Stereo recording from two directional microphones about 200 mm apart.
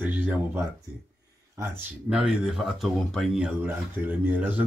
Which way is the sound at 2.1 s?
5° right (ahead or behind).